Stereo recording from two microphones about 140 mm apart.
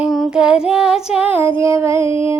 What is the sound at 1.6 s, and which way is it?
Music, 20° right (ahead or behind).